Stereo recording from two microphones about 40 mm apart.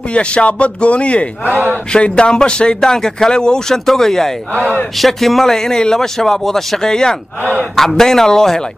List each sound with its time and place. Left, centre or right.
0.1 s speech: left
1.4 s a man's voice: right
1.9 s a man's voice: left